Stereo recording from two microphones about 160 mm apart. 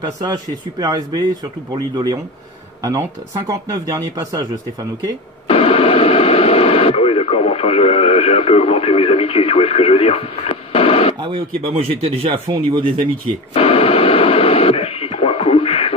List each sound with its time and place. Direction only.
0.2 s speech: 25° right (ahead or behind)
5.5 s speech: 35° left (ahead or behind)
11.1 s speech: 35° right (ahead or behind)
13.5 s radio: 35° left (ahead or behind)